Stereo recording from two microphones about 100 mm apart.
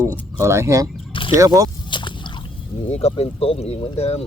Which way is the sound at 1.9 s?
55° left (ahead or behind).